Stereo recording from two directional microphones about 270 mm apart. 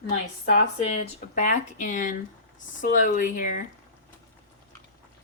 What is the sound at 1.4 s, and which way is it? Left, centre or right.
Speech, left.